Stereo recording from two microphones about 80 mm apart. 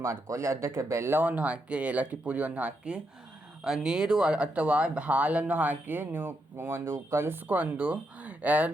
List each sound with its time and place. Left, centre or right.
0.0 s speech: right
7.4 s speech: centre